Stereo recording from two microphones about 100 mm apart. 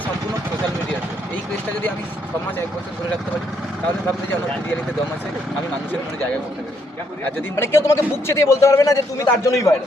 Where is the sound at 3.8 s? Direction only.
15° left (ahead or behind).